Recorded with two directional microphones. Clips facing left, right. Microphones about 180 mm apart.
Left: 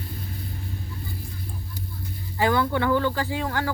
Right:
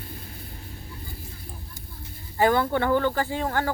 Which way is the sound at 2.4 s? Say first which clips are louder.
Right 1 dB; 45° right (ahead or behind).